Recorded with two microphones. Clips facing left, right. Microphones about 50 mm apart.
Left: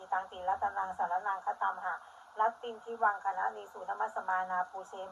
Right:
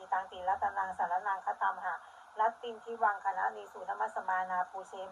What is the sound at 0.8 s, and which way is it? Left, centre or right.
Speech, right.